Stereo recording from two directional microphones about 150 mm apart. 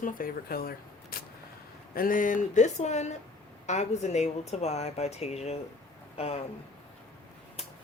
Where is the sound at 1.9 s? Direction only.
70° left (ahead or behind); by 5.6 s 45° left (ahead or behind).